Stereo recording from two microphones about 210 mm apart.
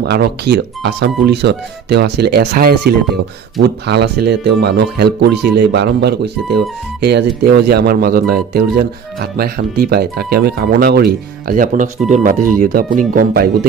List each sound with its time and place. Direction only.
0.0 s speech: 50° right (ahead or behind)